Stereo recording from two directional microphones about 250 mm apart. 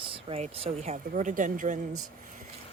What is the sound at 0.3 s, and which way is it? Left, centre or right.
Speech, right.